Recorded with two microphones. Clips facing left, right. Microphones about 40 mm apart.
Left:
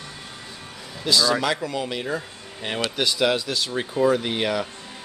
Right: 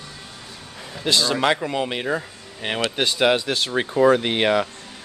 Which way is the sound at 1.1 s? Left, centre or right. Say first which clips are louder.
Even; right.